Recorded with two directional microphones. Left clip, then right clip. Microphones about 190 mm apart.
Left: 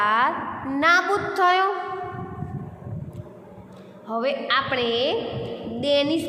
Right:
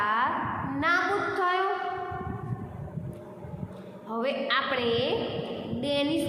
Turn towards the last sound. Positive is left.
turn(degrees=40)  # may be behind; listen again after turning